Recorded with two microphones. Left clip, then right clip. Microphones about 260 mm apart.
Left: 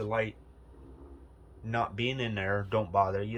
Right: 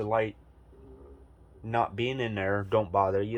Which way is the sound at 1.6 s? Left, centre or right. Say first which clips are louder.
Right 3 dB; right.